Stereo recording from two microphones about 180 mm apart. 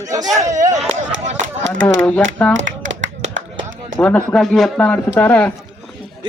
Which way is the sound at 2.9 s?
85° right.